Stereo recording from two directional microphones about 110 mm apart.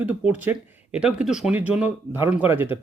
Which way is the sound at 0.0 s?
15° right (ahead or behind).